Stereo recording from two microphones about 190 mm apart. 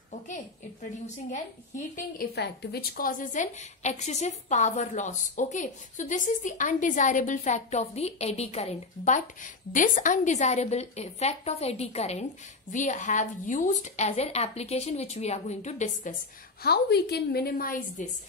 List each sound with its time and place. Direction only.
2.0 s a woman's voice: 55° left (ahead or behind)
16.6 s a woman's voice: 55° left (ahead or behind)